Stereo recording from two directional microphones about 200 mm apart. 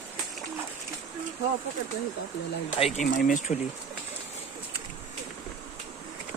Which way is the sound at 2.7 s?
30° left (ahead or behind).